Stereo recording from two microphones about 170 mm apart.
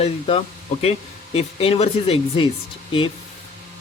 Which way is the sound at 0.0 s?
35° left (ahead or behind).